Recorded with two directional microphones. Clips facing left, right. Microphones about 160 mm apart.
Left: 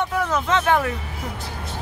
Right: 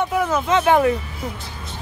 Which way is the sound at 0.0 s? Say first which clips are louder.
Right 3 dB; 10° right (ahead or behind).